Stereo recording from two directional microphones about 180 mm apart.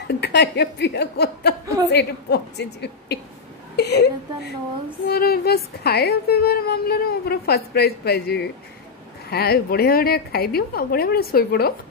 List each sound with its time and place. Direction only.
0.1 s a woman's voice: 70° left (ahead or behind)